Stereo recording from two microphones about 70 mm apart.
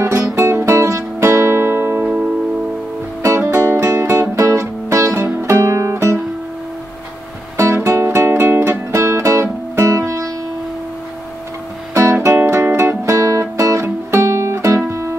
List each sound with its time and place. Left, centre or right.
0.0 s music: right
3.2 s music: right
7.5 s music: right
11.9 s music: right